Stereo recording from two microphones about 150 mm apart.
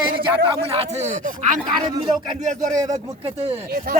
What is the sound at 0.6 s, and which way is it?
Speech, 40° right (ahead or behind).